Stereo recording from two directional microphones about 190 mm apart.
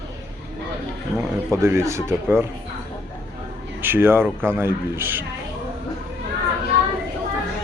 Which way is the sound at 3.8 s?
10° right (ahead or behind).